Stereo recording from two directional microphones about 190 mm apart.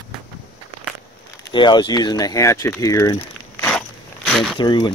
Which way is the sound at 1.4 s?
25° left (ahead or behind).